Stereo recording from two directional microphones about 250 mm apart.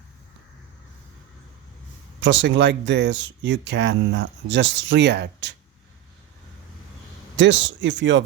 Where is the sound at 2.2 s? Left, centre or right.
Right.